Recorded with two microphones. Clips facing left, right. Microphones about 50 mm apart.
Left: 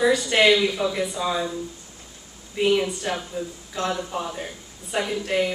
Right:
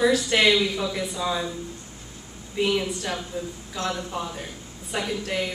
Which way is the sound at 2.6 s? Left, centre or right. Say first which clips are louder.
Left 3 dB; centre.